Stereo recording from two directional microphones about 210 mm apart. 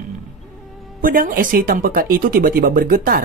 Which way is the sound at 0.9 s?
40° right (ahead or behind).